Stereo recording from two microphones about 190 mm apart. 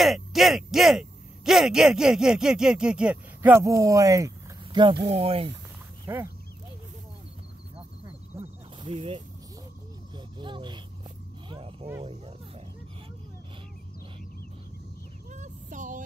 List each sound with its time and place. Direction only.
0.0 s speech: centre (ahead or behind); by 5.5 s 30° right (ahead or behind)
6.0 s speech: 15° right (ahead or behind)
8.3 s snake: 15° right (ahead or behind)
8.8 s speech: 30° right (ahead or behind)
10.1 s vehicle: 25° right (ahead or behind)
11.4 s dog: 25° right (ahead or behind)
12.0 s a sound: 30° right (ahead or behind)
15.3 s child singing: 40° right (ahead or behind)